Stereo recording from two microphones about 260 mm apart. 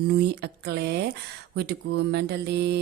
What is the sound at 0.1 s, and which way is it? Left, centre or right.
Speech, right.